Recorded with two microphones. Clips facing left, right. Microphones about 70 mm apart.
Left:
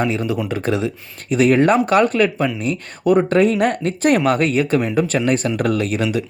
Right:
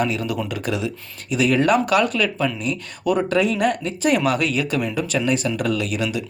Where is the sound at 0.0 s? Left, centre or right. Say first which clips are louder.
Left 3 dB; left.